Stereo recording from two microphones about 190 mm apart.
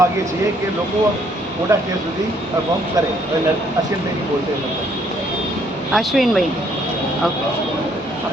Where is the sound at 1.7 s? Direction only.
15° right (ahead or behind).